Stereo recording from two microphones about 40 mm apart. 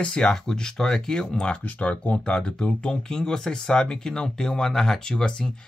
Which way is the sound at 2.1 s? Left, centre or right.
Left.